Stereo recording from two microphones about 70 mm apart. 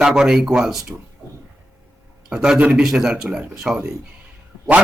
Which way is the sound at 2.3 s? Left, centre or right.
Centre.